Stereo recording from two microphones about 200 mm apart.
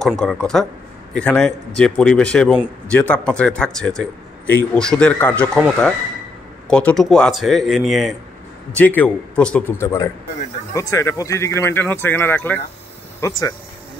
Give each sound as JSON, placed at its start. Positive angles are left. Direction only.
{"t": 0.0, "sound": "speech", "side_deg": 0}
{"t": 6.7, "sound": "speech", "side_deg": 5}